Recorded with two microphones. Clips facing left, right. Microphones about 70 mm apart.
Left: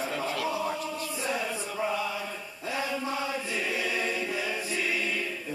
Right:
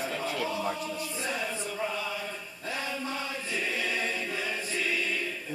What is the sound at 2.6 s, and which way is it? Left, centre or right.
Choir, centre.